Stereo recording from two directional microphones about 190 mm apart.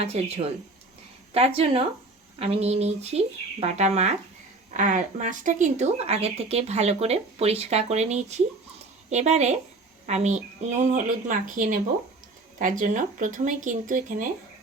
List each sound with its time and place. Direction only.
0.0 s speech: 35° right (ahead or behind)